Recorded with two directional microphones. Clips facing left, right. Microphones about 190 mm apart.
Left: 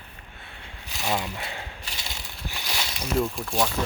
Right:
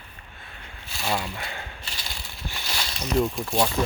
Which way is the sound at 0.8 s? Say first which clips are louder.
Even; 15° left (ahead or behind).